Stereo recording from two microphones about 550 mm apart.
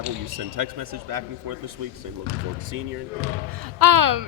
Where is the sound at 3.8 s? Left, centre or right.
Right.